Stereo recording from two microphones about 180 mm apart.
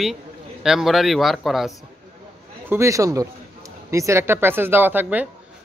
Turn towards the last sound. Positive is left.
turn(degrees=-10)  # may be behind; listen again after turning